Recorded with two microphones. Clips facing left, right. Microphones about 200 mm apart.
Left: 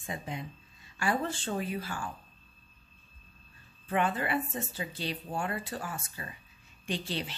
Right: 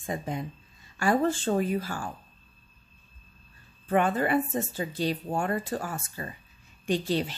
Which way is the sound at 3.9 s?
45° right (ahead or behind).